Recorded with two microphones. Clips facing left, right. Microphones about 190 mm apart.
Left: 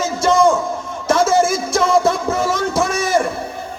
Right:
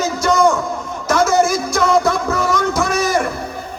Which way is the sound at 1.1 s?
25° left (ahead or behind).